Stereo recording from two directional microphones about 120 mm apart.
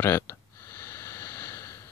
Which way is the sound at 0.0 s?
20° left (ahead or behind).